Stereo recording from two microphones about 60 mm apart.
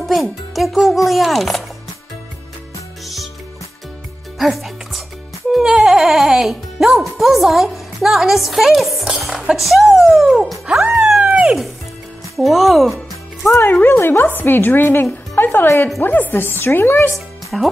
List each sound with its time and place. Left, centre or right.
0.0 s speech: centre
4.4 s music: centre
6.4 s speech: centre
10.8 s a sound: centre
11.1 s dog: centre
11.4 s speech: centre
13.6 s speech: left
17.5 s speech: centre